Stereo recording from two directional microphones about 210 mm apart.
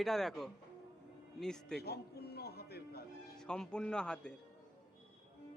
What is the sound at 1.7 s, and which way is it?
Music, 50° left (ahead or behind).